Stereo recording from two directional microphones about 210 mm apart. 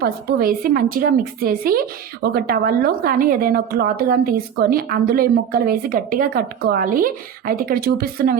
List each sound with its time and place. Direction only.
0.0 s a woman's voice: 45° right (ahead or behind)